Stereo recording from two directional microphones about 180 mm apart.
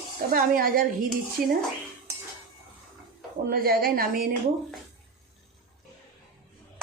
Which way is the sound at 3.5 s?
55° right (ahead or behind).